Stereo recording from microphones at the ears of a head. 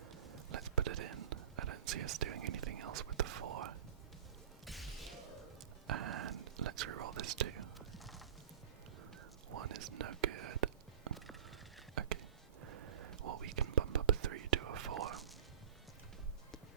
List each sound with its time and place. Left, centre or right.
0.0 s whispering: right
4.6 s a sound: centre
5.9 s whispering: right
9.5 s whispering: right
12.6 s whispering: right